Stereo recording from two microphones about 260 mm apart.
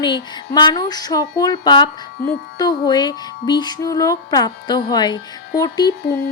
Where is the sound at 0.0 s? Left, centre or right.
Centre.